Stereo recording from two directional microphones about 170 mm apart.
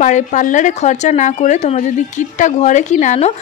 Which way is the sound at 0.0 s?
45° left (ahead or behind).